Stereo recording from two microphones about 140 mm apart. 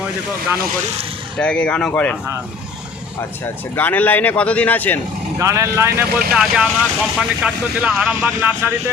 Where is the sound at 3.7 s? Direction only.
15° left (ahead or behind).